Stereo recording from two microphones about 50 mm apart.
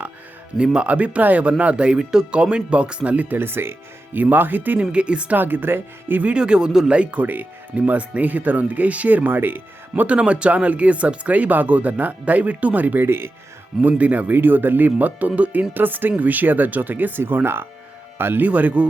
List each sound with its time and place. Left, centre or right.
0.6 s speech: centre
3.3 s speech: right
4.2 s speech: right
4.8 s speech: right
5.4 s speech: right
6.2 s speech: centre
7.3 s speech: right
9.9 s speech: right
13.1 s speech: right
13.8 s speech: right
18.4 s speech: right